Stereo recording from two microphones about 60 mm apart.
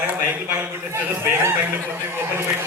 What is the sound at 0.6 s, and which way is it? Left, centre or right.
Speech, right.